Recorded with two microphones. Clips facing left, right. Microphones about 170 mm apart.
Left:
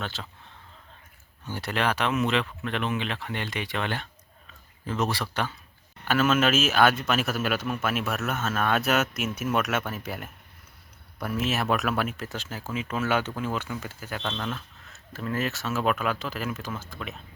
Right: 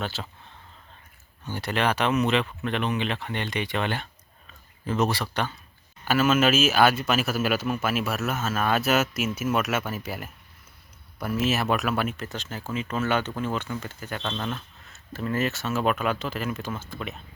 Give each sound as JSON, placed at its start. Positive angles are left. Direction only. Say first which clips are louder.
{"t": 0.0, "sound": "speech", "louder": "right 3 dB", "side_deg": -5}
{"t": 1.5, "sound": "speech", "louder": "right 2 dB", "side_deg": 0}